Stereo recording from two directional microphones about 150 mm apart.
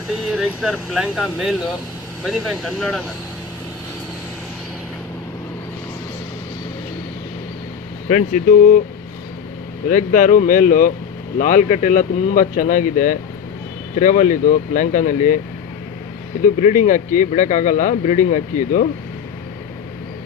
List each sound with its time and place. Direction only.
0.3 s speech: centre (ahead or behind)
8.1 s speech: 60° left (ahead or behind)
9.9 s speech: 60° left (ahead or behind)
16.4 s speech: 55° left (ahead or behind)